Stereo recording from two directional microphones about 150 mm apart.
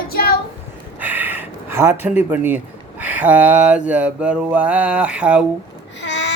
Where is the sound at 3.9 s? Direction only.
10° right (ahead or behind).